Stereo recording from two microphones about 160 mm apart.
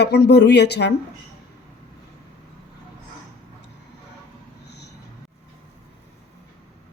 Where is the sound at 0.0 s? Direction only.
90° left.